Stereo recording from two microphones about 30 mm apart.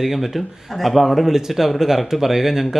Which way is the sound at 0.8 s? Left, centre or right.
Centre.